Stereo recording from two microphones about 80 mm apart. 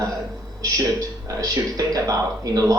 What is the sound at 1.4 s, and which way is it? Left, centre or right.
Speech, right.